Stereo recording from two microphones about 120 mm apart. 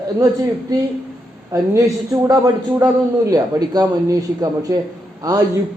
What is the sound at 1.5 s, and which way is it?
A man's voice, 25° right (ahead or behind).